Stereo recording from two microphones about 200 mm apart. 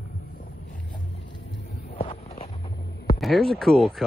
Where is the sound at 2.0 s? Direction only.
30° left (ahead or behind).